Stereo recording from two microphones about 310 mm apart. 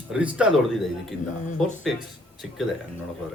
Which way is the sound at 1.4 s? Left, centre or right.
Left.